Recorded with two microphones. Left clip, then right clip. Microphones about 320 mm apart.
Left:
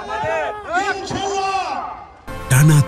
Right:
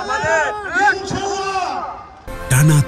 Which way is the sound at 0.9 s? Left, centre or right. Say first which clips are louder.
Even; left.